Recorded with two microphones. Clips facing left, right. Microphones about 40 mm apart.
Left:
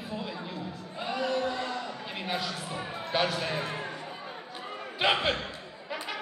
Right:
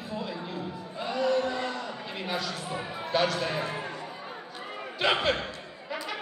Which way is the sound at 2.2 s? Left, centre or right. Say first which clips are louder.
Even; centre.